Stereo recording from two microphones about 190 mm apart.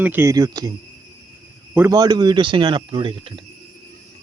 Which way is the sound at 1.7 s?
15° right (ahead or behind).